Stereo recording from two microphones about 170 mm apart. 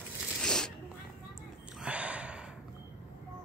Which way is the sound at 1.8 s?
5° right (ahead or behind).